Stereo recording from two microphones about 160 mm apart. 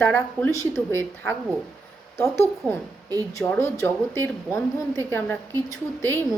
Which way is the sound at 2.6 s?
5° left (ahead or behind).